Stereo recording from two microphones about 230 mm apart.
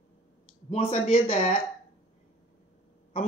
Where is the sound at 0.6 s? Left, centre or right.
Left.